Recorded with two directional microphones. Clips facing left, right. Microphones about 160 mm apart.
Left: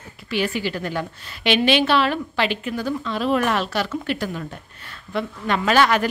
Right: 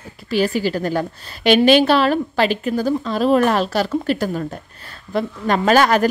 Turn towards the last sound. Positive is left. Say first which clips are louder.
# right 4 dB
turn(degrees=-40)  # may be behind; listen again after turning